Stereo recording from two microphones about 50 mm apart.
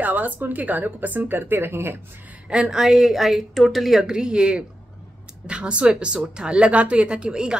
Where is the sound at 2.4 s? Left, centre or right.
Centre.